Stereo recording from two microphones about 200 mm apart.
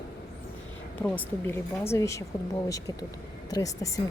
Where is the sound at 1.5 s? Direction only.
10° left (ahead or behind).